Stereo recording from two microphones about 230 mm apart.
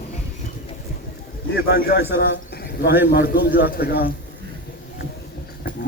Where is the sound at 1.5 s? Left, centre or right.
Left.